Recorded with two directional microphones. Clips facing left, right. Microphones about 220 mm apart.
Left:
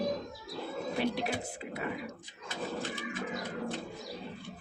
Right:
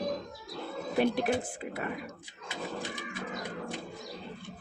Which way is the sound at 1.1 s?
50° right (ahead or behind).